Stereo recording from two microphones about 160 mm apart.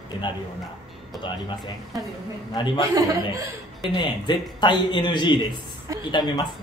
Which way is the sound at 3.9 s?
30° left (ahead or behind).